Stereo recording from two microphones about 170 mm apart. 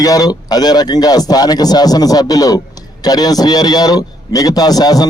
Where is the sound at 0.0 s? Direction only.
20° left (ahead or behind).